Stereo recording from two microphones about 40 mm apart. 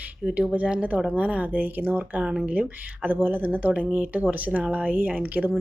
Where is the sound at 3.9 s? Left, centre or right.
Right.